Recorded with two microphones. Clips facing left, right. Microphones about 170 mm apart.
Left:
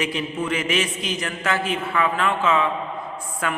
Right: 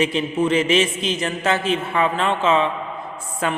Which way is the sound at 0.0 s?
25° right (ahead or behind).